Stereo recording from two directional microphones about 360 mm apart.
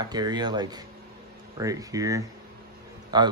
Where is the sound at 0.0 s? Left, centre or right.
Centre.